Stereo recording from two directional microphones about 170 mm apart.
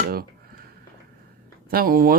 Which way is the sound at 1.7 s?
60° right (ahead or behind).